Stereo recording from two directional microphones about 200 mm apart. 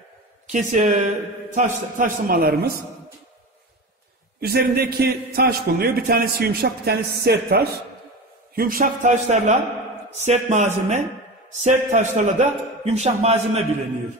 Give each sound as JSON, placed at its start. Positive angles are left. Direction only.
{"t": 0.5, "sound": "a man's voice", "side_deg": -40}
{"t": 4.4, "sound": "a man's voice", "side_deg": -50}